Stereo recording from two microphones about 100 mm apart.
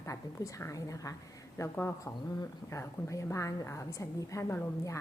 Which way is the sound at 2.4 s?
30° left (ahead or behind).